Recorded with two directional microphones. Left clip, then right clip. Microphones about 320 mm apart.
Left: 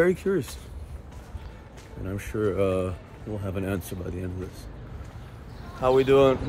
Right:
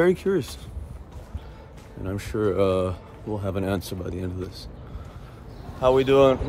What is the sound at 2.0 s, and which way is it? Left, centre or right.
Speech, centre.